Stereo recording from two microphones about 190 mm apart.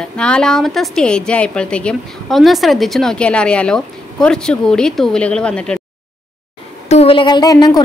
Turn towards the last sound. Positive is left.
turn(degrees=20)  # may be behind; listen again after turning